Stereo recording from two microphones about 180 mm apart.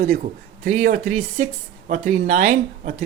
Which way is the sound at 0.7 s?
40° right (ahead or behind).